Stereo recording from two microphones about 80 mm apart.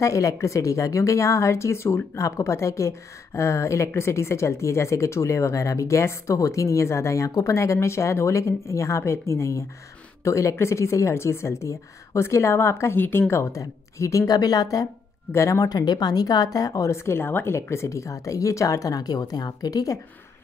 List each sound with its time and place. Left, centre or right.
0.0 s speech: left
13.3 s speech: left
15.3 s speech: left
15.6 s speech: left